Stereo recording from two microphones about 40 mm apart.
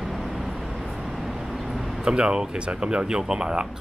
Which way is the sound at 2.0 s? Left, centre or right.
Right.